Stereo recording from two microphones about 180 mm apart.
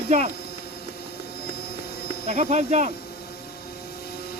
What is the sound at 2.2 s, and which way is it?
Speech, 40° right (ahead or behind).